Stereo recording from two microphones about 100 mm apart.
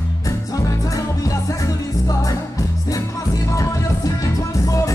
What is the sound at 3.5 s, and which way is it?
Music, 35° left (ahead or behind).